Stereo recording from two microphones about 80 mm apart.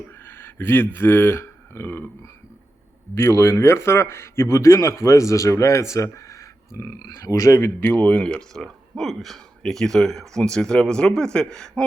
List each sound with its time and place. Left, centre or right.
0.3 s speech: left
3.2 s a man's voice: left; by 11.9 s centre